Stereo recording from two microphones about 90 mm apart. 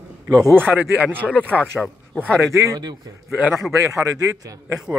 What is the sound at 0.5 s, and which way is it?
Speech, 25° right (ahead or behind).